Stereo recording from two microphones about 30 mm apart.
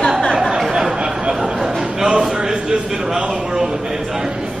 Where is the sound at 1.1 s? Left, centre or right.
Right.